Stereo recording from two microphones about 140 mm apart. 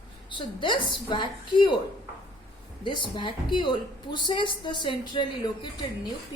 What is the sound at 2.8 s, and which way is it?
A woman's voice, 35° left (ahead or behind).